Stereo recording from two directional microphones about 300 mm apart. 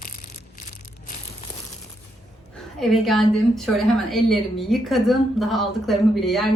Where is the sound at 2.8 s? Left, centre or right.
Centre.